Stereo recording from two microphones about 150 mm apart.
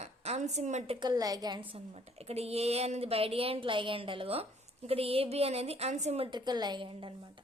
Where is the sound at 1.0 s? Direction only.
25° right (ahead or behind).